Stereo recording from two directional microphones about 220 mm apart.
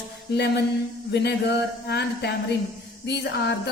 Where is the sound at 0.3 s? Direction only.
50° left (ahead or behind).